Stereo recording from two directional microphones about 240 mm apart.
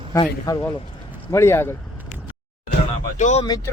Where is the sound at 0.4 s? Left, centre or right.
Centre.